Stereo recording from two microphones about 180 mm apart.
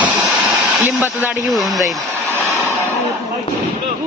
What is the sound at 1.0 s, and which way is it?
Speech, 10° right (ahead or behind).